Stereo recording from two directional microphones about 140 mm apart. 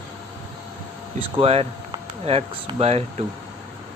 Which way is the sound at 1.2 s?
45° right (ahead or behind).